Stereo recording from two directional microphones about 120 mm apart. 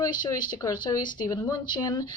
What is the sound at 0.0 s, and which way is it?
Speech, 40° left (ahead or behind).